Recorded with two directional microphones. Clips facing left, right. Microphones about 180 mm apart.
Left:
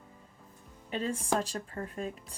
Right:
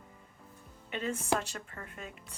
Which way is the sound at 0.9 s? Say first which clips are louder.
Left 1 dB; 35° left (ahead or behind).